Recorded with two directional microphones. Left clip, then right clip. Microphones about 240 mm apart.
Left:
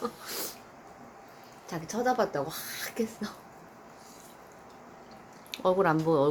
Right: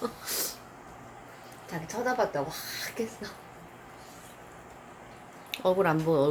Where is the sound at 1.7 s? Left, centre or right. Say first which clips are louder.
Left 1 dB; centre.